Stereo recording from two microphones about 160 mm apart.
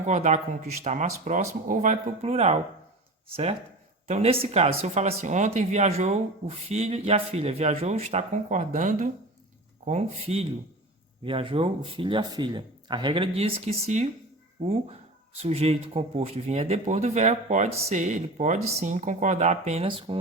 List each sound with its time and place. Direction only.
0.0 s speech: 45° right (ahead or behind)
4.0 s speech: 40° right (ahead or behind)
15.4 s speech: 40° right (ahead or behind)